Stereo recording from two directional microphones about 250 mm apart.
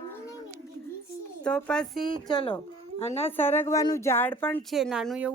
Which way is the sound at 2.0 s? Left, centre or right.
Right.